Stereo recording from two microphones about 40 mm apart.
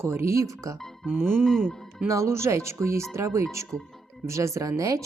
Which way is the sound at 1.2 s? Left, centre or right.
Right.